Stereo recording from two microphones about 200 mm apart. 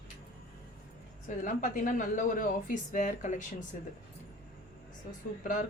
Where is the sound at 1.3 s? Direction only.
40° left (ahead or behind).